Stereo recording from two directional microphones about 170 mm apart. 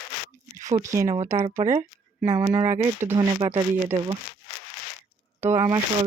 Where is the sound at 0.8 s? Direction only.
15° right (ahead or behind).